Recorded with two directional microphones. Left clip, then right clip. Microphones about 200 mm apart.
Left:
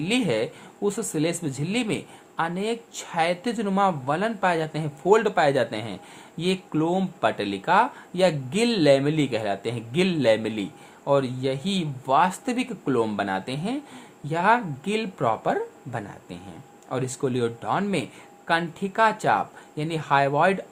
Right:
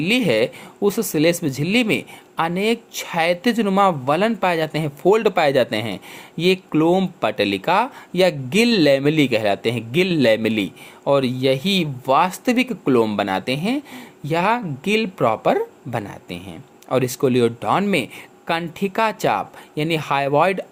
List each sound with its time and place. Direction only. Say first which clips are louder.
0.0 s speech: right 7 dB; 35° right (ahead or behind)